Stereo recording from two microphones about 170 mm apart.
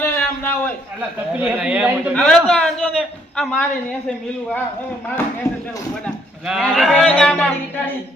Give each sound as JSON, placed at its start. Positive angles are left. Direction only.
{"t": 0.0, "sound": "a sound", "side_deg": 10}
{"t": 1.3, "sound": "a man's voice", "side_deg": -5}
{"t": 2.1, "sound": "a man's voice", "side_deg": 5}
{"t": 6.1, "sound": "speech", "side_deg": 0}